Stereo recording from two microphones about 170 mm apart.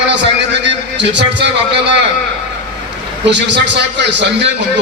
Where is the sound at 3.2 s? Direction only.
90° right.